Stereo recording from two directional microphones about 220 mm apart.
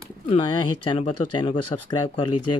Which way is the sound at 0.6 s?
90° left.